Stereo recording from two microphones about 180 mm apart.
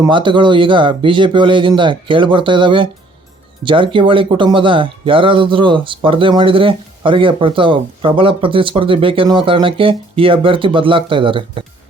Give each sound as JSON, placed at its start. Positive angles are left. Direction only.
{"t": 0.0, "sound": "speech", "side_deg": -25}